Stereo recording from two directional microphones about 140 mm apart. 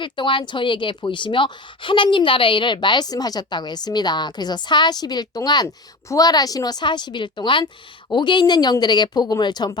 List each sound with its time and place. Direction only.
0.0 s a woman's voice: 35° left (ahead or behind)